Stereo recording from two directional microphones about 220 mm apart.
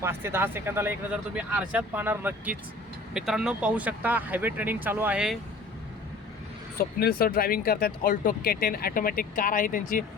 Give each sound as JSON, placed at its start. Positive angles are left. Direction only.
{"t": 0.0, "sound": "speech", "side_deg": -10}
{"t": 6.7, "sound": "speech", "side_deg": 45}